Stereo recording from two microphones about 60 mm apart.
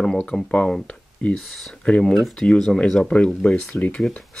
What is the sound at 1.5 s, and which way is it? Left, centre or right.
Speech, centre.